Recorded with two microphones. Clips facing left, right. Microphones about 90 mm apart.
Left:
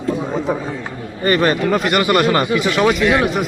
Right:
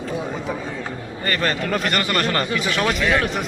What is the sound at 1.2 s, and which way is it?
Speech, 15° left (ahead or behind).